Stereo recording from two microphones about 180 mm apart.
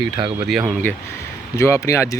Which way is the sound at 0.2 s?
25° right (ahead or behind).